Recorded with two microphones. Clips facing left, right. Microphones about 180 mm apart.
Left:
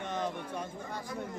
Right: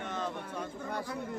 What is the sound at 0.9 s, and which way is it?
Speech, 60° right (ahead or behind).